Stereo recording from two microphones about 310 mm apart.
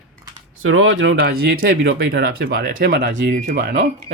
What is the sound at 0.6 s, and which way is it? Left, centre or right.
Speech, right.